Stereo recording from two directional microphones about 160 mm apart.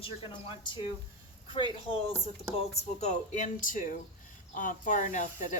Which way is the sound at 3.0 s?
50° left (ahead or behind).